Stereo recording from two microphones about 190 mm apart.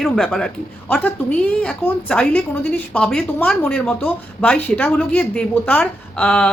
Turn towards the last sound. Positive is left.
turn(degrees=5)  # may be behind; listen again after turning